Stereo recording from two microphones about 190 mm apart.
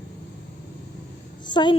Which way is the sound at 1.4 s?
25° left (ahead or behind).